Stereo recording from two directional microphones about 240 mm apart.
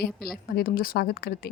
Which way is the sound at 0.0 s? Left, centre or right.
Left.